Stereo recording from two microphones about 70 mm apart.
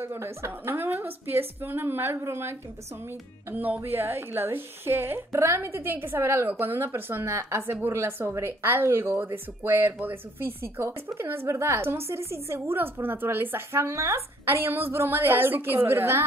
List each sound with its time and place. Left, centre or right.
0.0 s a woman's voice: right
3.5 s a woman's voice: right
5.7 s a woman's voice: right